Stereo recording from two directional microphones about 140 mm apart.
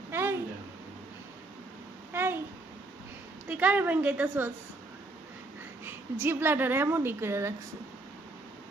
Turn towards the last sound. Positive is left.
turn(degrees=-20)  # may be behind; listen again after turning